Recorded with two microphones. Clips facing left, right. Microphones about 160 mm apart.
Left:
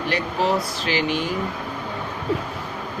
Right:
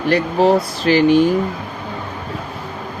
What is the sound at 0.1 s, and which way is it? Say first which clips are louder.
Speech: right 9 dB; 45° right (ahead or behind).